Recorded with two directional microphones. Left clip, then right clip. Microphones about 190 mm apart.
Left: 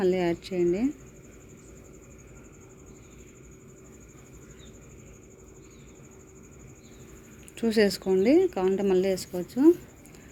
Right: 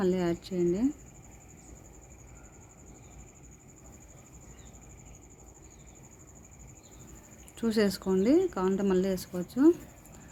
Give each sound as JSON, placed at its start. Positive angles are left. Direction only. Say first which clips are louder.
{"t": 0.0, "sound": "speech", "louder": "left 4 dB", "side_deg": 0}
{"t": 7.5, "sound": "speech", "louder": "left 5 dB", "side_deg": 0}